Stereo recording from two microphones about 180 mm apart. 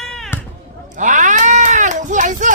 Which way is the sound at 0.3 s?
10° left (ahead or behind).